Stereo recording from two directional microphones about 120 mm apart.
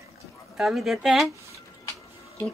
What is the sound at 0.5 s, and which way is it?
Speech, centre (ahead or behind).